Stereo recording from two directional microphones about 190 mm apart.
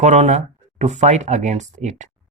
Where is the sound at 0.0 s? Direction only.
35° right (ahead or behind).